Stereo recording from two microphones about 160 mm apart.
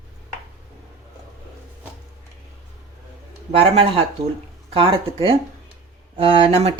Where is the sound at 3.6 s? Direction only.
35° right (ahead or behind).